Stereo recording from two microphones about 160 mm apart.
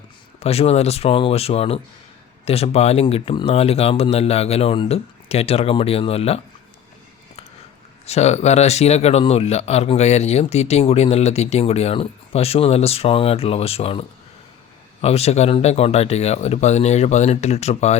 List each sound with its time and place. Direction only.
0.3 s speech: 40° left (ahead or behind)
8.0 s speech: 40° left (ahead or behind)
15.0 s speech: 40° left (ahead or behind)